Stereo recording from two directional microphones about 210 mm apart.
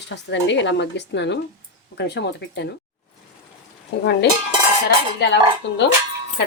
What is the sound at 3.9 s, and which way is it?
Speech, 55° left (ahead or behind).